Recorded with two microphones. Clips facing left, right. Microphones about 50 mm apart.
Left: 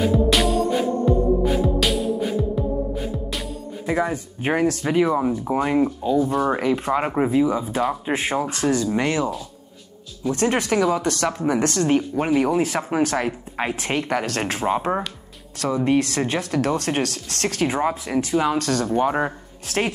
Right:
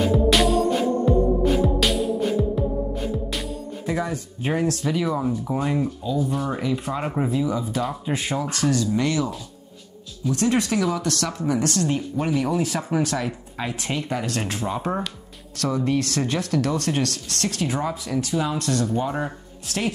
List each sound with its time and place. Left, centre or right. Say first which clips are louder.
0.1 s music: even; centre
3.8 s speech: left 4 dB; left
10.8 s speech: left 4 dB; left
15.5 s speech: left 3 dB; left